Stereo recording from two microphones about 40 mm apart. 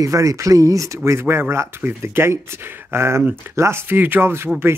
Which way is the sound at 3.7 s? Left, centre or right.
Right.